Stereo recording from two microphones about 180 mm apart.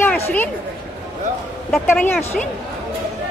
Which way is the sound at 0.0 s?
10° left (ahead or behind).